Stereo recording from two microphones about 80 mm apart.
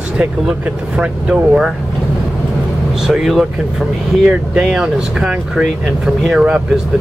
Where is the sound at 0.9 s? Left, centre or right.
Centre.